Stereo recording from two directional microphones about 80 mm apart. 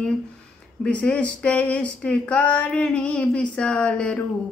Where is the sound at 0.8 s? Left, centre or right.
Centre.